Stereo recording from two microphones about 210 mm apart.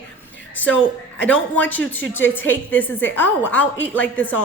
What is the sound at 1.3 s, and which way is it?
A woman's voice, 10° left (ahead or behind).